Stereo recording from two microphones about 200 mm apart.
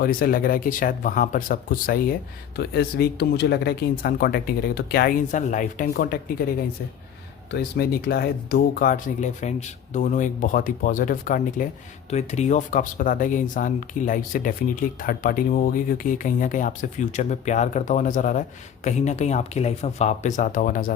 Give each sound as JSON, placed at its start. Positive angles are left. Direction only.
{"t": 0.0, "sound": "speech", "side_deg": 45}
{"t": 7.5, "sound": "speech", "side_deg": 50}